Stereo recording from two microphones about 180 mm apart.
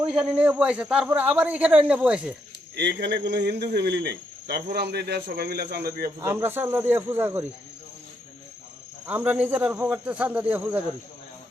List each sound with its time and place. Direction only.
0.1 s a man's voice: 5° right (ahead or behind)
2.7 s speech: 70° right (ahead or behind)
3.7 s cricket: 70° right (ahead or behind)
6.2 s a man's voice: 10° right (ahead or behind)
9.0 s a man's voice: 10° right (ahead or behind)